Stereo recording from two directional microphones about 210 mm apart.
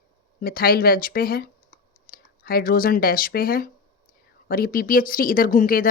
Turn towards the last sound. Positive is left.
turn(degrees=40)  # may be behind; listen again after turning